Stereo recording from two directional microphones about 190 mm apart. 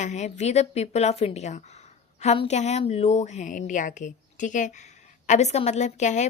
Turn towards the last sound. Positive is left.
turn(degrees=40)  # may be behind; listen again after turning